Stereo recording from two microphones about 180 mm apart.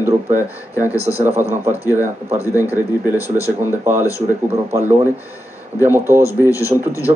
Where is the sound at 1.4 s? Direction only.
15° right (ahead or behind).